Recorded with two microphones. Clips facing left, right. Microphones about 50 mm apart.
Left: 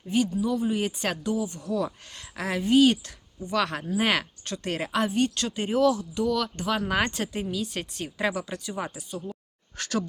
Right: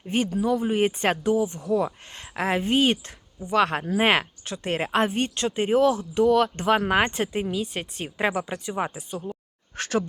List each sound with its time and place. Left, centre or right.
0.0 s speech: right
0.4 s speech: right